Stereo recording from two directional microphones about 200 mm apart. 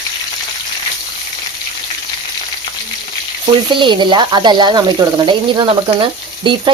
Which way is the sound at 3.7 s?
25° right (ahead or behind).